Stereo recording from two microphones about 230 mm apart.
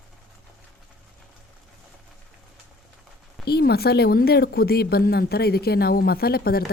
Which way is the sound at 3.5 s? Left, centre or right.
Left.